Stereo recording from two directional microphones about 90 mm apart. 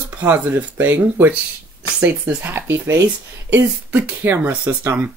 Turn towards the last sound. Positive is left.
turn(degrees=-15)  # may be behind; listen again after turning